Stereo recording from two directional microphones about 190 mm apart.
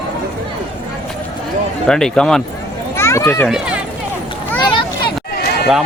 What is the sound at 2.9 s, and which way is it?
Children playing, 15° left (ahead or behind).